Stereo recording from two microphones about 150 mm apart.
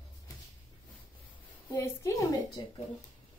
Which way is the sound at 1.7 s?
20° left (ahead or behind).